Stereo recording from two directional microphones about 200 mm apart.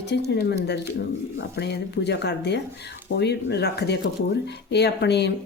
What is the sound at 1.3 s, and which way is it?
A woman's voice, 55° left (ahead or behind).